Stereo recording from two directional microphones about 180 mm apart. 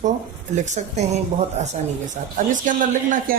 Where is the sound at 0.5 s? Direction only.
40° right (ahead or behind).